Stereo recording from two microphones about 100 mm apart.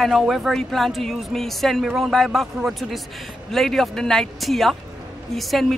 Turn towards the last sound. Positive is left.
turn(degrees=0)  # may be behind; listen again after turning